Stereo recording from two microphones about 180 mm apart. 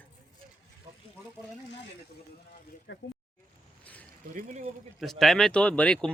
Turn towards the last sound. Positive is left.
turn(degrees=5)  # may be behind; listen again after turning